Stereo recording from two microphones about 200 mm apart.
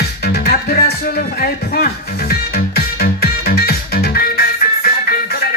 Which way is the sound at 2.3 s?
50° left (ahead or behind).